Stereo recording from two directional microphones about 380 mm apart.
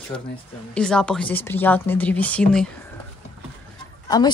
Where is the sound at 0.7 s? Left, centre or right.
Centre.